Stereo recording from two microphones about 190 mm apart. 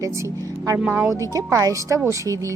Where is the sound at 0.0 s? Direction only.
15° right (ahead or behind).